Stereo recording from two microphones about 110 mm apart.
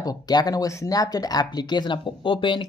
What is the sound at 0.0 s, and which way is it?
Speech, 35° left (ahead or behind).